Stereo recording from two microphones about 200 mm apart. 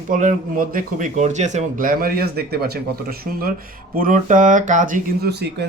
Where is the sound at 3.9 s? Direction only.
40° right (ahead or behind).